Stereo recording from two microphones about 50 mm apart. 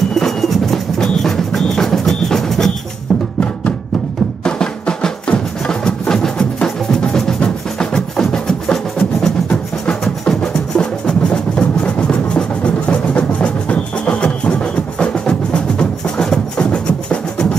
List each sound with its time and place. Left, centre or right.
0.1 s music: centre
4.5 s music: centre